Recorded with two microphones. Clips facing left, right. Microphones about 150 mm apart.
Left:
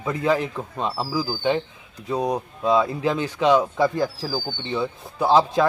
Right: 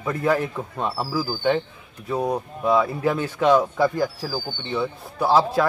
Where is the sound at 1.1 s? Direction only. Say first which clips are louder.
Right 1 dB; 15° left (ahead or behind).